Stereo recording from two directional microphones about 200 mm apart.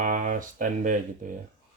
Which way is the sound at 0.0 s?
40° right (ahead or behind).